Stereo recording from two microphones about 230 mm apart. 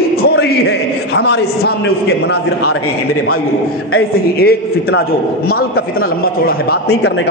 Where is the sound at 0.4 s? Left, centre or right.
Left.